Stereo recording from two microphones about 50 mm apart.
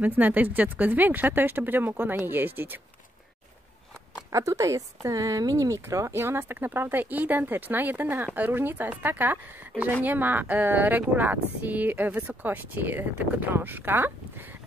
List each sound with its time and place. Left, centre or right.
0.0 s speech: right
4.3 s speech: right